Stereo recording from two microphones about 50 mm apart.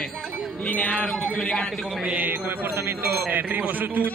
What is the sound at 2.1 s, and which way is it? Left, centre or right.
Music, right.